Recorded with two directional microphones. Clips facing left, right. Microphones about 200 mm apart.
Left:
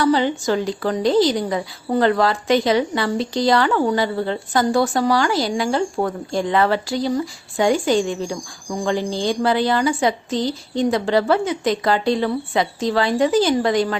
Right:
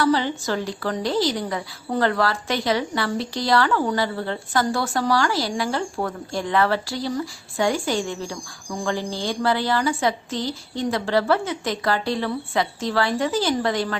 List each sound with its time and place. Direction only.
0.0 s a woman's voice: 15° left (ahead or behind)